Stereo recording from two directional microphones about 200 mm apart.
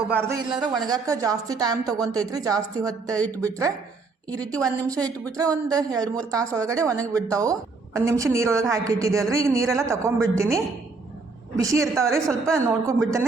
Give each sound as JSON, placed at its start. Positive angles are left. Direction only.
{"t": 0.1, "sound": "speech", "side_deg": -10}
{"t": 4.3, "sound": "speech", "side_deg": -15}